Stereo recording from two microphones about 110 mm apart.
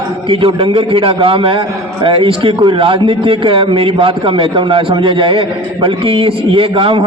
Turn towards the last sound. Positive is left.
turn(degrees=-50)  # may be behind; listen again after turning